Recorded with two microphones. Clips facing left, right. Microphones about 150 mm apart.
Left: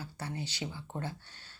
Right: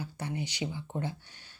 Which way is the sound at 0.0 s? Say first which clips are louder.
Right 4 dB; 15° right (ahead or behind).